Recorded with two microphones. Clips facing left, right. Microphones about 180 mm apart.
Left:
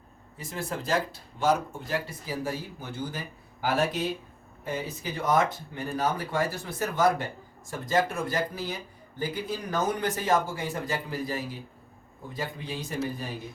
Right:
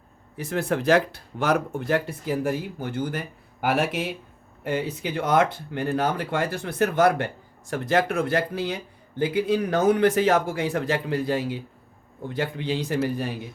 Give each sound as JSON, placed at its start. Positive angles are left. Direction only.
{"t": 0.3, "sound": "speech", "side_deg": -65}